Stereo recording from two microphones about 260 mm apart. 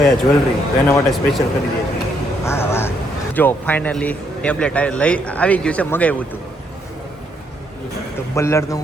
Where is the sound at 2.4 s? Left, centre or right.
Centre.